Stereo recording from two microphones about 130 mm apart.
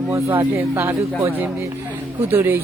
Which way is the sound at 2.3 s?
15° right (ahead or behind).